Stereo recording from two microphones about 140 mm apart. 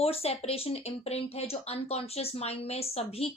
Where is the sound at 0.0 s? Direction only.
45° left (ahead or behind).